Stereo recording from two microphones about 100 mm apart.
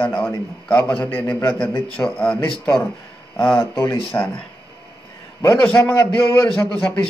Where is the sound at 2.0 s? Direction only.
10° left (ahead or behind).